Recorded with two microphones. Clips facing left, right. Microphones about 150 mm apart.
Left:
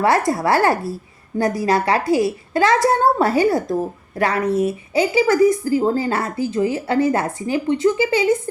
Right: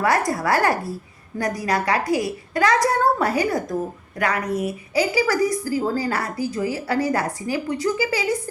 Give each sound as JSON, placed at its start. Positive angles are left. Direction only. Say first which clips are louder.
{"t": 0.3, "sound": "a woman's voice", "louder": "left 4 dB", "side_deg": 25}